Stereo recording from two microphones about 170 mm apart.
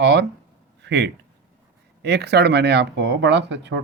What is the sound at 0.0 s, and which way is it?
Speech, 90° right.